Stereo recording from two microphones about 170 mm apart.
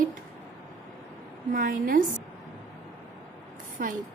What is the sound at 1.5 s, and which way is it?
Speech, 55° right (ahead or behind).